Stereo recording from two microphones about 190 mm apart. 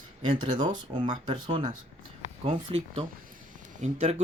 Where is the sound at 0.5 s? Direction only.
20° right (ahead or behind).